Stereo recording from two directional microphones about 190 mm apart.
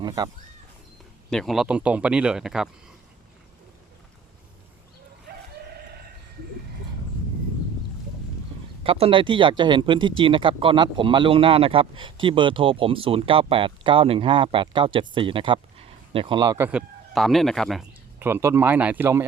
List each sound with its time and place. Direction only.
1.3 s speech: centre (ahead or behind)
8.8 s speech: 30° right (ahead or behind)
16.6 s speech: centre (ahead or behind)
18.2 s speech: 10° right (ahead or behind)